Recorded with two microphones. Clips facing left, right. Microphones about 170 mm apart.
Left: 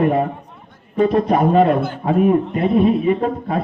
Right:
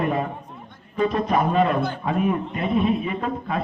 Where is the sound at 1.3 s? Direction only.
45° left (ahead or behind).